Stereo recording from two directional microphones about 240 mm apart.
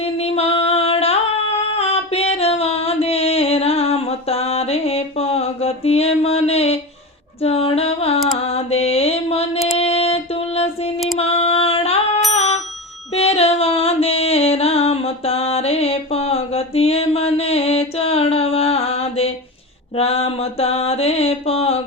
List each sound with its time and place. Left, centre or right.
0.0 s singing: left
7.4 s a sound: left
8.4 s mantra: left
9.7 s a sound: left
11.2 s music: left
12.3 s bicycle bell: left
13.1 s music: left
20.0 s mantra: left